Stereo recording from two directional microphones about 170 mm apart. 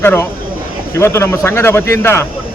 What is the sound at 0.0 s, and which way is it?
A man's voice, 15° left (ahead or behind).